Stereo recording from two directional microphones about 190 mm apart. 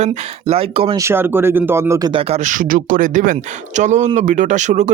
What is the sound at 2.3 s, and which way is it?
Speech, 40° right (ahead or behind).